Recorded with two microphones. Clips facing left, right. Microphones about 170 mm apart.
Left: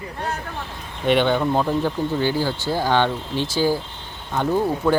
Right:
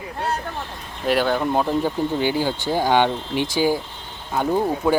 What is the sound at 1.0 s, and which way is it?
Speech, 5° right (ahead or behind).